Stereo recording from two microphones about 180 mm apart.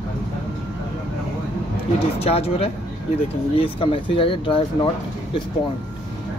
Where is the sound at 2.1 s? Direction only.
35° left (ahead or behind).